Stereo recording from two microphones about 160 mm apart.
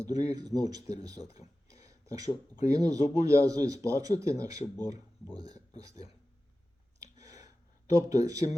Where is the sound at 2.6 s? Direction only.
20° right (ahead or behind).